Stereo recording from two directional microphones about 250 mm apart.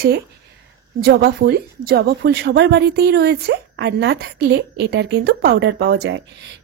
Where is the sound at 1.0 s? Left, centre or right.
Right.